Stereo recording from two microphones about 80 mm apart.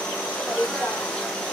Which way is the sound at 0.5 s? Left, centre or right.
Centre.